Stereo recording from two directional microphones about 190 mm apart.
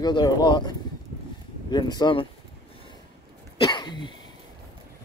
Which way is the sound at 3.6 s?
25° left (ahead or behind).